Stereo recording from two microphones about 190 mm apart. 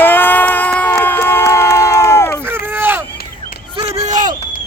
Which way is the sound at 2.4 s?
10° right (ahead or behind).